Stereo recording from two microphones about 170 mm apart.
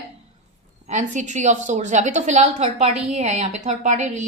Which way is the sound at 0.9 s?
45° right (ahead or behind).